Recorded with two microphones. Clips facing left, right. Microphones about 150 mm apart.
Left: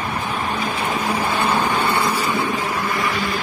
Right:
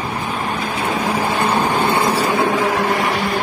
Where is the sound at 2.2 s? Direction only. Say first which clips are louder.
Right 5 dB; 80° right.